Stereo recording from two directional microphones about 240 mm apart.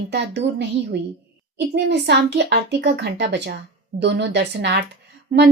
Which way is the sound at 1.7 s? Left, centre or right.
Right.